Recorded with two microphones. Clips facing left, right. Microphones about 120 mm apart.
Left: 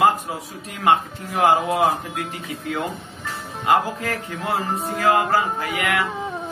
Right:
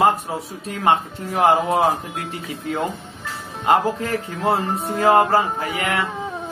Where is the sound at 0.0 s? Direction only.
30° right (ahead or behind).